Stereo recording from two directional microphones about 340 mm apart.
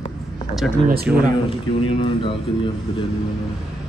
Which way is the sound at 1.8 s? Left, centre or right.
Centre.